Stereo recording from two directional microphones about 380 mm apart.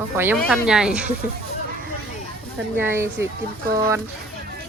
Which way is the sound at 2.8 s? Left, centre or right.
Centre.